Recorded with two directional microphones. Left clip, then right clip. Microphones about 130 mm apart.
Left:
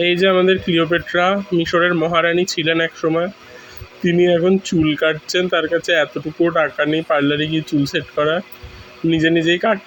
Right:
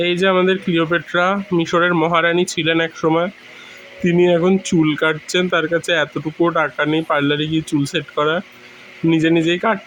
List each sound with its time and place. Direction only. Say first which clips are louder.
0.0 s speech: left 1 dB; 30° right (ahead or behind)